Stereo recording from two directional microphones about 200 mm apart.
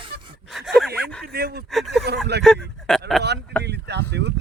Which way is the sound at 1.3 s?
55° right (ahead or behind).